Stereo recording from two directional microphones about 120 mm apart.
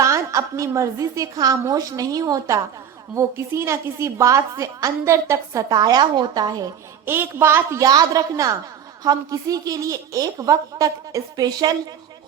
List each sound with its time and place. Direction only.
0.0 s a woman's voice: 25° right (ahead or behind)
7.0 s a woman's voice: 20° right (ahead or behind)